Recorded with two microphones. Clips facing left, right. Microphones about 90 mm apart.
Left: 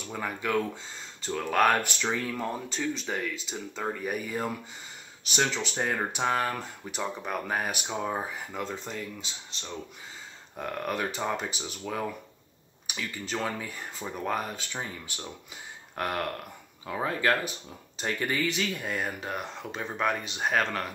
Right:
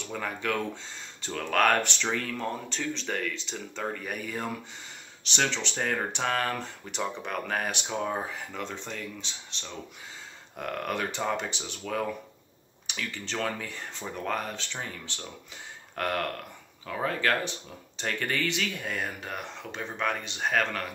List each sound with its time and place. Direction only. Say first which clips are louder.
0.1 s speech: left 2 dB; 5° left (ahead or behind)
17.5 s speech: right 1 dB; 10° left (ahead or behind)